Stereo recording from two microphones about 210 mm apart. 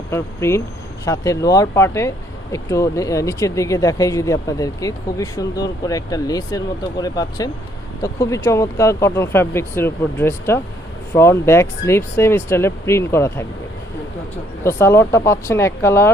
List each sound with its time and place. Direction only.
0.1 s speech: 15° left (ahead or behind)
14.6 s speech: 10° left (ahead or behind)